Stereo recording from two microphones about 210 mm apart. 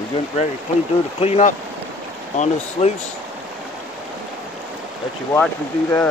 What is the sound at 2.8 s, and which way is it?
Speech, 30° left (ahead or behind).